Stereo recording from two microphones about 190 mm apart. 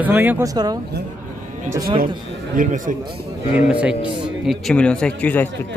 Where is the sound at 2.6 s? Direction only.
45° right (ahead or behind).